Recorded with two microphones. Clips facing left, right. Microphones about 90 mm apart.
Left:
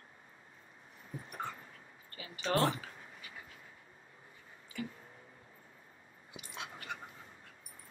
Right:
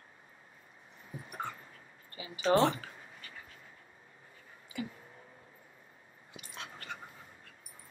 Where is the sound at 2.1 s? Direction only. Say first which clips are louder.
Right 4 dB; 10° right (ahead or behind).